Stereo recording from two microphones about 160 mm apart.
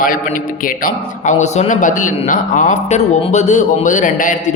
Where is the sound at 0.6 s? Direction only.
60° left (ahead or behind).